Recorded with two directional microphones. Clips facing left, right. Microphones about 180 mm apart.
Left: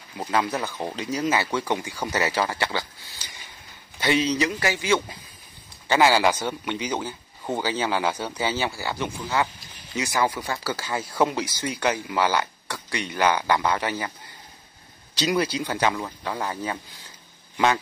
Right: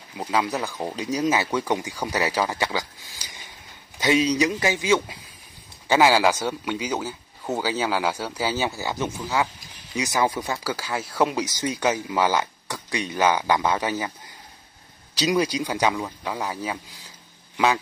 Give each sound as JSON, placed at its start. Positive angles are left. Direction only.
{"t": 0.2, "sound": "a man's voice", "side_deg": -10}
{"t": 4.0, "sound": "a man's voice", "side_deg": -10}
{"t": 11.2, "sound": "a man's voice", "side_deg": -15}
{"t": 15.1, "sound": "a man's voice", "side_deg": -10}